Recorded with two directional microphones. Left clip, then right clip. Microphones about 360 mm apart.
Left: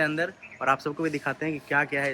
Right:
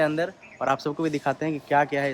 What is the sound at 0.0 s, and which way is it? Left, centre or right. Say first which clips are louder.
Speech: right 2 dB; right.